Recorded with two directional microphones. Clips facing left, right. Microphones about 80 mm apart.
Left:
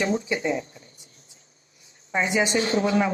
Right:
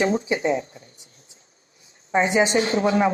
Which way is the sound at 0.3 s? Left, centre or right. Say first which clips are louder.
Right 3 dB; right.